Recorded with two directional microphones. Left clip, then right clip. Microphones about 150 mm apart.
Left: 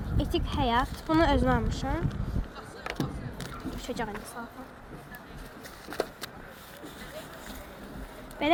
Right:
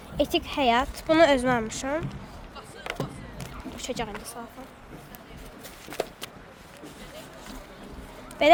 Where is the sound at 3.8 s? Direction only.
55° right (ahead or behind).